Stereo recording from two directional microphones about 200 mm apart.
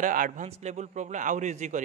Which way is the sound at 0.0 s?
40° right (ahead or behind).